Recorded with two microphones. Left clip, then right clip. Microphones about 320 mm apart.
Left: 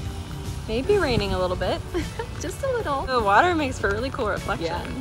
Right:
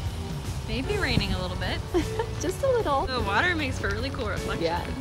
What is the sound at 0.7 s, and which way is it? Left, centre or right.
A woman's voice, centre.